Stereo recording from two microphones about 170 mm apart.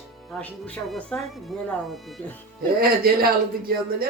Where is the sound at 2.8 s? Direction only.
60° right (ahead or behind).